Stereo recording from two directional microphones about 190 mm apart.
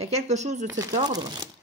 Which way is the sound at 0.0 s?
35° right (ahead or behind).